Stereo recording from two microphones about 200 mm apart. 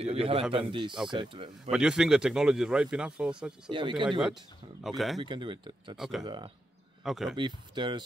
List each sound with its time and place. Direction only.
0.0 s speech: 30° right (ahead or behind)
1.7 s speech: 5° right (ahead or behind)
3.6 s speech: 25° right (ahead or behind)
4.8 s speech: centre (ahead or behind)
5.2 s speech: 25° right (ahead or behind)
5.9 s speech: centre (ahead or behind)
6.2 s speech: 25° right (ahead or behind)
7.1 s speech: centre (ahead or behind)
7.3 s speech: 25° right (ahead or behind)